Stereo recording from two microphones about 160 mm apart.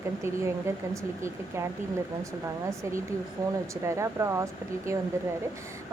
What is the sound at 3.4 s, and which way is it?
A woman's voice, 20° right (ahead or behind).